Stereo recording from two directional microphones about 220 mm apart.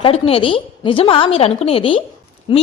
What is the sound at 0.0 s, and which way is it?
A woman's voice, 25° left (ahead or behind).